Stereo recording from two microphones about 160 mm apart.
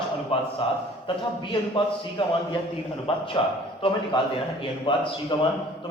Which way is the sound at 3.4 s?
30° left (ahead or behind).